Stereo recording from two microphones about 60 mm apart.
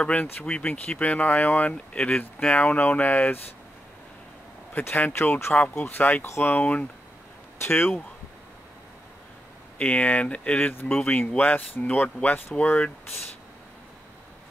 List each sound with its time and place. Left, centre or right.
0.0 s speech: left
2.0 s speech: centre; by 3.2 s left
4.7 s speech: left
7.6 s speech: left
9.8 s speech: left